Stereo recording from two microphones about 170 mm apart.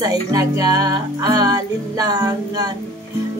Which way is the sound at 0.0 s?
20° right (ahead or behind).